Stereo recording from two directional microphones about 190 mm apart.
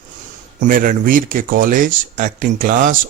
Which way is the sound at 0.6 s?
45° right (ahead or behind).